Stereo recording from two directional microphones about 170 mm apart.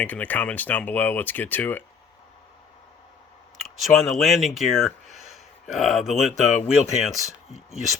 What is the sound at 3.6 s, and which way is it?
Speech, centre (ahead or behind).